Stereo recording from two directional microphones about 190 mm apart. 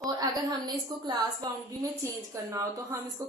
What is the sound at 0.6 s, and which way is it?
A woman's voice, 20° right (ahead or behind).